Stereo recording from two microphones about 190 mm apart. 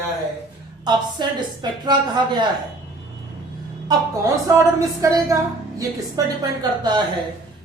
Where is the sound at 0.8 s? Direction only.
25° right (ahead or behind).